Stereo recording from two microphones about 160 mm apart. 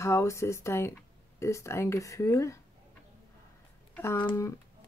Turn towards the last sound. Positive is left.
turn(degrees=15)  # may be behind; listen again after turning